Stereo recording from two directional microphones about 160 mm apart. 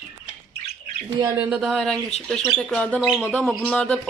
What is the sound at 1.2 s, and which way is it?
Speech, 15° right (ahead or behind).